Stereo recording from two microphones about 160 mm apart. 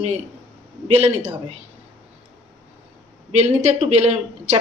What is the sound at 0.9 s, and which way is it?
Speech, 45° right (ahead or behind).